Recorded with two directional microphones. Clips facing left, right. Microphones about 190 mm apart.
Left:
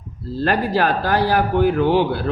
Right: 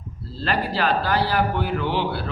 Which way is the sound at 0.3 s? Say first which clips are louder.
Left 6 dB; 45° left (ahead or behind).